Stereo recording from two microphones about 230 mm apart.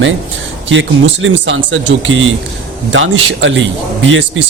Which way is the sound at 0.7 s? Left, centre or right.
Right.